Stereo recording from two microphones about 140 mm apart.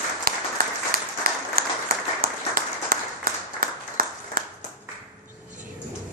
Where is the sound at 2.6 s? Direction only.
90° right.